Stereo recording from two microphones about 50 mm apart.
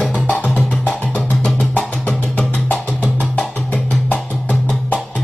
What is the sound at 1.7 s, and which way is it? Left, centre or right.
Music, left.